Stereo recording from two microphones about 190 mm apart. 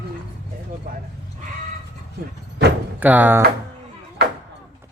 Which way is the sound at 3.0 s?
10° right (ahead or behind).